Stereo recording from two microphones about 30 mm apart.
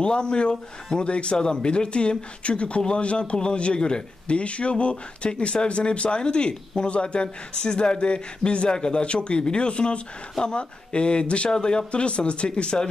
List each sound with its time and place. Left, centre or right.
0.0 s speech: left
7.6 s speech: left